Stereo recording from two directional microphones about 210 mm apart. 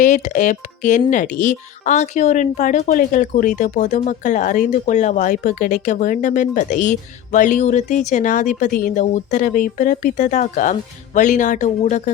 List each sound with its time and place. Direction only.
0.0 s speech: 35° left (ahead or behind)